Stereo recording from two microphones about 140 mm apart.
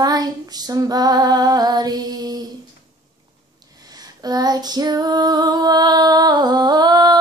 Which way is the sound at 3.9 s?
30° right (ahead or behind).